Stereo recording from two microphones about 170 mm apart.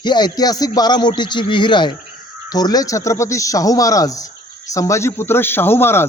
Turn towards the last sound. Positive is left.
turn(degrees=15)  # may be behind; listen again after turning